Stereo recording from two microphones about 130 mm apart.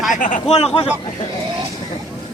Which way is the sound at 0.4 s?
50° left (ahead or behind).